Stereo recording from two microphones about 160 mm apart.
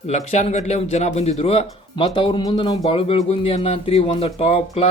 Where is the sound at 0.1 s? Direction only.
45° left (ahead or behind).